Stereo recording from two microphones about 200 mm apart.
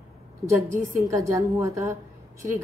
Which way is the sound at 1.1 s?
15° right (ahead or behind).